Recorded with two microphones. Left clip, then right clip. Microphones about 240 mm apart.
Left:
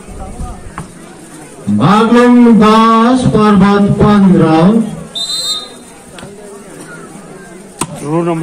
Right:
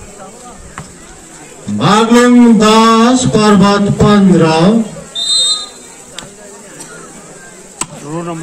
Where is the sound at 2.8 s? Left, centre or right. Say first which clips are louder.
Even; right.